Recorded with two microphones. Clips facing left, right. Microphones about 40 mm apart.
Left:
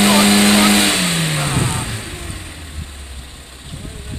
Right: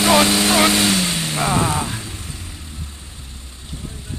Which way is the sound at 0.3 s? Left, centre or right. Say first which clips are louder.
Left 4 dB; left.